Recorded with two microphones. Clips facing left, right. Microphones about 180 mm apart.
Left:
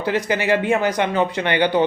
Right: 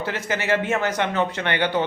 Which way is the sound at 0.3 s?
15° left (ahead or behind).